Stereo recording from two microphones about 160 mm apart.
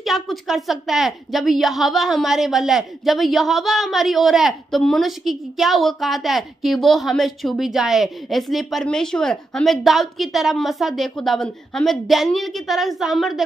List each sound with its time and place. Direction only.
0.0 s a woman's voice: centre (ahead or behind)